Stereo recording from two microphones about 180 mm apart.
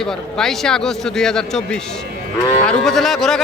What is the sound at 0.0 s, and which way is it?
Speech, centre (ahead or behind).